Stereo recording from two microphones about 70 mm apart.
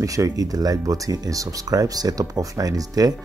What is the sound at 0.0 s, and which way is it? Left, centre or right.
Speech, right.